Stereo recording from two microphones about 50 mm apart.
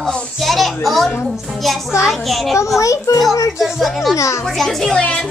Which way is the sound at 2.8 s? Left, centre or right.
Left.